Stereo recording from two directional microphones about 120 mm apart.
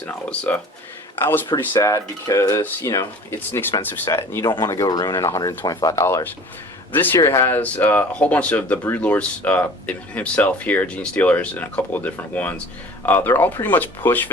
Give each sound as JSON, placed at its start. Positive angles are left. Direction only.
{"t": 0.0, "sound": "speech", "side_deg": 15}
{"t": 1.5, "sound": "speech", "side_deg": 25}